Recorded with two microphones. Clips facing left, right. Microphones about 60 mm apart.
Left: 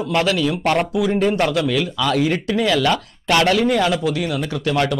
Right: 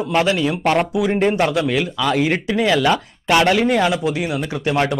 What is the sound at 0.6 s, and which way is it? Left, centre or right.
Speech, centre.